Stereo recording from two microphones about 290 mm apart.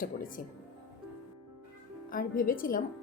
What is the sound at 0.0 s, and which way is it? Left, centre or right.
Speech, left.